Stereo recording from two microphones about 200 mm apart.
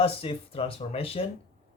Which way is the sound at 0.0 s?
30° left (ahead or behind).